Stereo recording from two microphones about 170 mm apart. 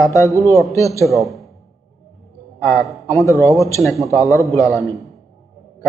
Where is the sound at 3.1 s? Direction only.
20° left (ahead or behind).